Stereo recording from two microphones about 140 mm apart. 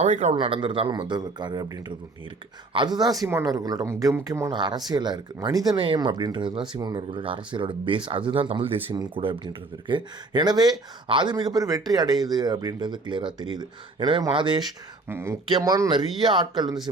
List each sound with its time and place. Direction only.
0.0 s a man's voice: 55° right (ahead or behind)
0.3 s speech: 40° right (ahead or behind)
15.0 s speech: 20° right (ahead or behind)